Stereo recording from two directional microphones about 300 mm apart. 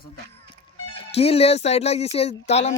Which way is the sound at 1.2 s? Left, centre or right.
Centre.